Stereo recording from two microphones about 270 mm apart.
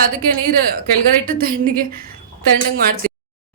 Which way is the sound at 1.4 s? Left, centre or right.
Right.